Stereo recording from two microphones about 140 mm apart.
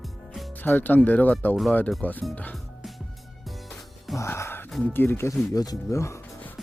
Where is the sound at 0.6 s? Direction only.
15° left (ahead or behind).